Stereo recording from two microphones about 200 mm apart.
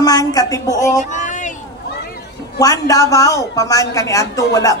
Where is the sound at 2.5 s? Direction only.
15° left (ahead or behind).